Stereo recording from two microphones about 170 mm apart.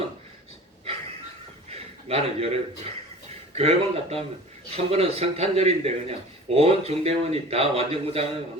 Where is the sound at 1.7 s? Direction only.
35° right (ahead or behind).